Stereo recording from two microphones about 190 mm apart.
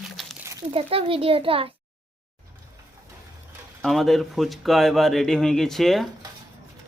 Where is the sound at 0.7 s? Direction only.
30° right (ahead or behind).